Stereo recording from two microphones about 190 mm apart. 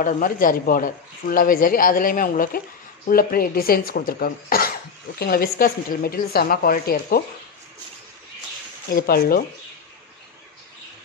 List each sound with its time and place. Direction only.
0.0 s speech: 45° left (ahead or behind)
8.9 s speech: 55° left (ahead or behind)